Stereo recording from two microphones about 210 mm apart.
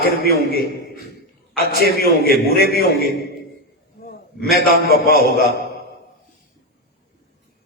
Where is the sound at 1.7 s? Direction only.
50° left (ahead or behind).